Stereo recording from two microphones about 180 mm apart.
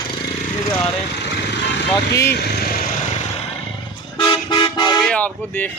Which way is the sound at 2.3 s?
60° left (ahead or behind).